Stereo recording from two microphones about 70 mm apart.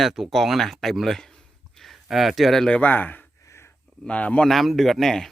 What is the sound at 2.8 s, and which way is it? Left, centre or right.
A man's voice, left.